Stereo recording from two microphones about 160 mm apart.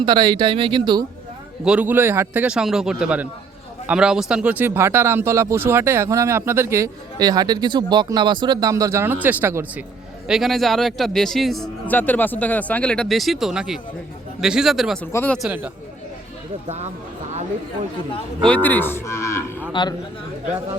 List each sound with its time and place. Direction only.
0.0 s speech: 25° right (ahead or behind)
1.6 s speech: 10° right (ahead or behind)
10.2 s a man's voice: centre (ahead or behind)
15.0 s speech: 10° left (ahead or behind)
15.4 s speech: 5° right (ahead or behind)
18.4 s cattle: 10° left (ahead or behind)
19.8 s speech: 30° left (ahead or behind)